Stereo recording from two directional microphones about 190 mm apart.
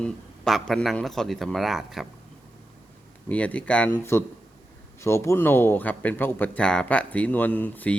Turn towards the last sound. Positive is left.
turn(degrees=10)  # may be behind; listen again after turning